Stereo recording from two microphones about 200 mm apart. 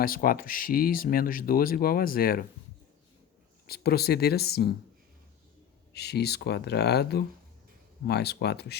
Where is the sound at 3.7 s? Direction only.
50° left (ahead or behind).